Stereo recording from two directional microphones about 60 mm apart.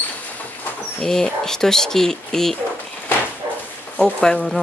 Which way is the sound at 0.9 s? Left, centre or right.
Centre.